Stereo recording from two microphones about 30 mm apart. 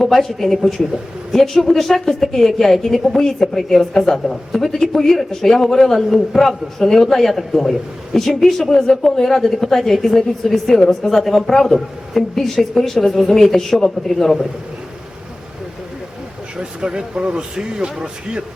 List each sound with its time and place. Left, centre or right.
0.0 s a woman's voice: centre
16.6 s speech: right